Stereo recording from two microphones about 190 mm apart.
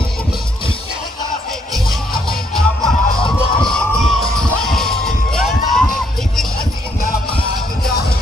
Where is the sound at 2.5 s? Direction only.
Centre (ahead or behind).